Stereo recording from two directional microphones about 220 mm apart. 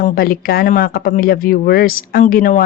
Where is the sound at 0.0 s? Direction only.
40° left (ahead or behind).